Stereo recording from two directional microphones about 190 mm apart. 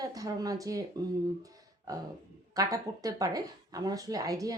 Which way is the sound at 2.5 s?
20° right (ahead or behind).